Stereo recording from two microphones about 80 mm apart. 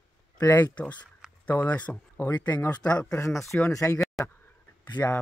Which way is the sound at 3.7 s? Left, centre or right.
Left.